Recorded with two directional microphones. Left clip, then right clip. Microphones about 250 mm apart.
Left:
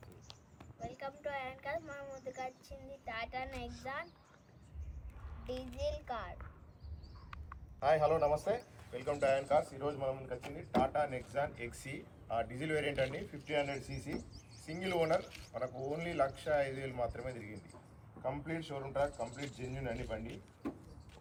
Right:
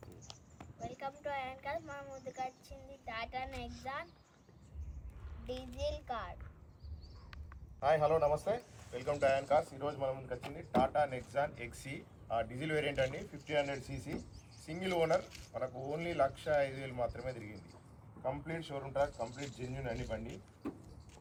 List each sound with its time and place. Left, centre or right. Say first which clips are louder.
0.0 s a sound: right 2 dB; right
0.8 s a man's voice: right 1 dB; centre
5.5 s a man's voice: even; centre
13.1 s a man's voice: left 1 dB; centre
13.5 s a man's voice: right 1 dB; centre
15.1 s a man's voice: right 1 dB; centre
15.5 s a man's voice: even; centre